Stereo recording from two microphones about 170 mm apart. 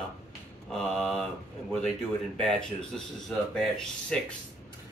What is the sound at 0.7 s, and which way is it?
Mantra, centre (ahead or behind).